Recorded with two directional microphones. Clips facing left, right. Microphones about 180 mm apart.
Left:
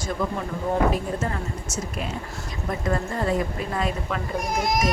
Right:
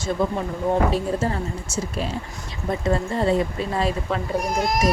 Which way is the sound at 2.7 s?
25° right (ahead or behind).